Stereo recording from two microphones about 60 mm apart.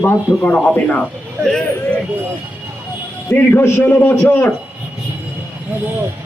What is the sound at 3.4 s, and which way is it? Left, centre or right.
Speech, left.